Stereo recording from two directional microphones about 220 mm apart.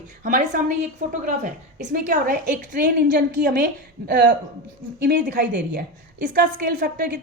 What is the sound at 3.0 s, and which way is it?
Speech, 50° right (ahead or behind).